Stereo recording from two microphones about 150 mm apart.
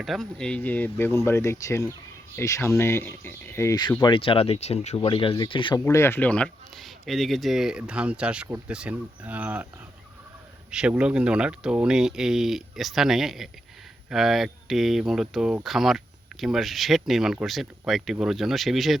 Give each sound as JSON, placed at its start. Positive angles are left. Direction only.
{"t": 0.0, "sound": "speech", "side_deg": 0}
{"t": 4.0, "sound": "speech", "side_deg": 35}
{"t": 5.8, "sound": "speech", "side_deg": 15}
{"t": 10.7, "sound": "speech", "side_deg": -5}